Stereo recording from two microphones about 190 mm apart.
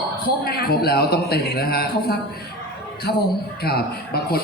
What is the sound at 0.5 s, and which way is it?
Speech, 55° left (ahead or behind).